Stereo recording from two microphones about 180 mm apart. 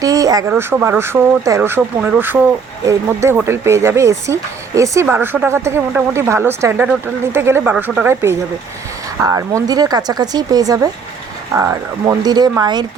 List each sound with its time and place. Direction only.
0.0 s speech: 20° right (ahead or behind)